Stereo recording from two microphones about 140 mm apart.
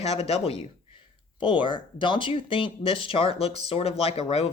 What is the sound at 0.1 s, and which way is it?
Speech, 45° left (ahead or behind).